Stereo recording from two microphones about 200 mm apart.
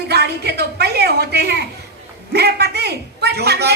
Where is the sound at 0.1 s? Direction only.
55° right (ahead or behind).